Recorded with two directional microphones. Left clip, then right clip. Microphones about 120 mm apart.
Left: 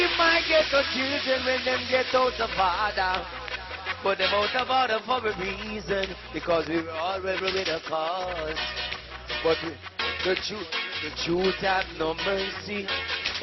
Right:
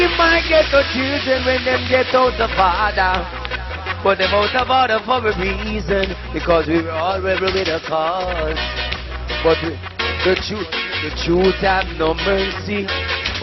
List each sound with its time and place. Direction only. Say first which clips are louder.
0.0 s speech: right 7 dB; 25° left (ahead or behind)
1.1 s a sound: right 9 dB; 30° left (ahead or behind)
10.0 s music: right 9 dB; 25° left (ahead or behind)